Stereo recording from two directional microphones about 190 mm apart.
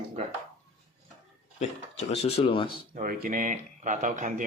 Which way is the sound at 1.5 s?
35° left (ahead or behind).